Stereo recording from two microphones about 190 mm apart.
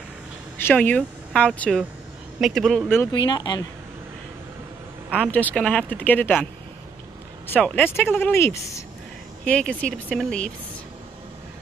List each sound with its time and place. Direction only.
0.6 s a woman's voice: 10° left (ahead or behind)
3.1 s speech: 25° left (ahead or behind)
5.1 s speech: 5° left (ahead or behind)
7.4 s speech: 10° left (ahead or behind)